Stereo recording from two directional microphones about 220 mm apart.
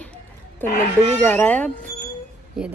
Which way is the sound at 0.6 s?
10° left (ahead or behind).